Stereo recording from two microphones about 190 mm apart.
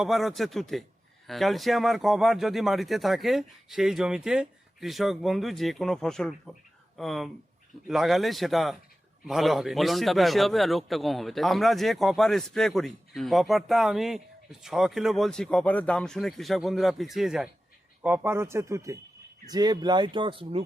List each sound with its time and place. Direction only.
0.0 s a man's voice: centre (ahead or behind); by 20.6 s 25° right (ahead or behind)